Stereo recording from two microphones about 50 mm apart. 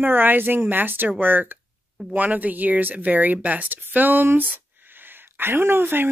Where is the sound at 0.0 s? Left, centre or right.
Right.